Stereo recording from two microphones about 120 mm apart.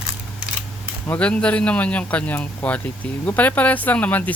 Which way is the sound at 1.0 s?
10° left (ahead or behind).